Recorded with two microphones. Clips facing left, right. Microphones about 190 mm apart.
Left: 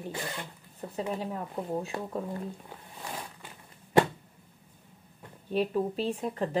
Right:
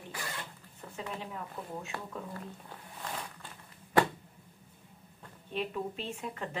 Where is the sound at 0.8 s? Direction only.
35° left (ahead or behind).